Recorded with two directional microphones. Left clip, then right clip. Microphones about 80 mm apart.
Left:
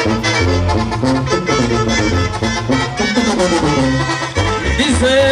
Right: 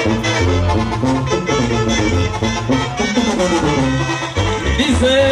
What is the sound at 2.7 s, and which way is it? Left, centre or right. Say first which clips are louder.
Music: left 2 dB; left.